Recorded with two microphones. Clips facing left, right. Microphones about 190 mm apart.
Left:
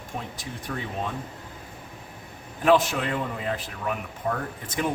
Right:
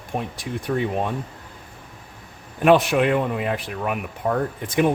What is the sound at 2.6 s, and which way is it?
Speech, 65° right (ahead or behind).